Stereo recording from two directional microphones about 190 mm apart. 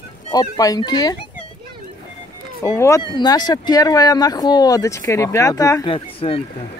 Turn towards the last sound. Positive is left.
turn(degrees=30)  # may be behind; listen again after turning